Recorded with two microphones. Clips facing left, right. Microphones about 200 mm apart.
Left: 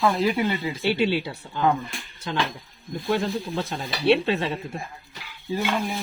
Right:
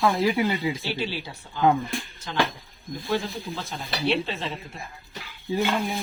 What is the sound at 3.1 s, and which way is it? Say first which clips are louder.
Speech: left 3 dB; 60° left (ahead or behind).